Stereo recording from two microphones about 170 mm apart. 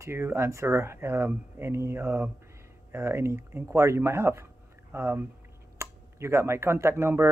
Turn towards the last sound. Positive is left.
turn(degrees=-15)  # may be behind; listen again after turning